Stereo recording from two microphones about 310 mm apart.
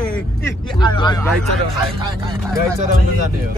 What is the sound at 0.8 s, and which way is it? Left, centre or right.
Speech, centre.